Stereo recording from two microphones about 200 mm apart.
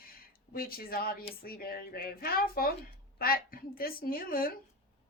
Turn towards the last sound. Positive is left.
turn(degrees=45)  # may be behind; listen again after turning